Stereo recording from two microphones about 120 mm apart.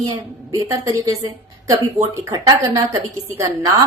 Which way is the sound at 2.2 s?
30° right (ahead or behind).